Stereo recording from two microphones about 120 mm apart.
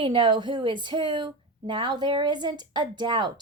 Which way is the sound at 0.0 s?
45° right (ahead or behind).